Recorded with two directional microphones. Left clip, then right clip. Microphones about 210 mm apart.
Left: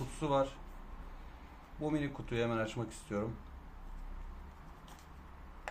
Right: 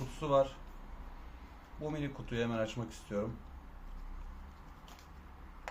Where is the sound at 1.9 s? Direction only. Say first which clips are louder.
Left 2 dB; 20° left (ahead or behind).